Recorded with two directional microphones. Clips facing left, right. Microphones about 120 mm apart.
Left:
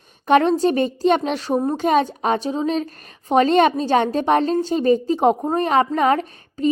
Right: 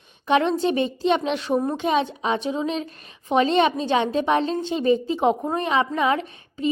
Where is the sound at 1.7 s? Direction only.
45° left (ahead or behind).